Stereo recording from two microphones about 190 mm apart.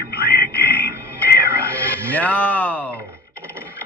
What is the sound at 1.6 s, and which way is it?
Music, 10° left (ahead or behind).